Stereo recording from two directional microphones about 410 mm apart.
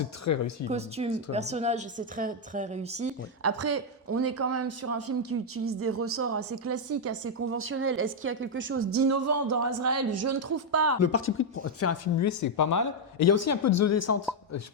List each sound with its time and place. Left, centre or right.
0.3 s speech: left
0.7 s a woman's voice: centre
3.4 s speech: right
11.0 s speech: left